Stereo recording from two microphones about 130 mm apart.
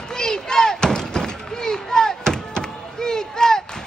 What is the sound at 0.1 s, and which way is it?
Slam, 5° left (ahead or behind).